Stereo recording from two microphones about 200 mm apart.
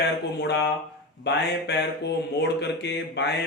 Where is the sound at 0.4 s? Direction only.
55° left (ahead or behind).